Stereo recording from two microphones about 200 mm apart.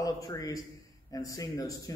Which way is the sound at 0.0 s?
20° left (ahead or behind).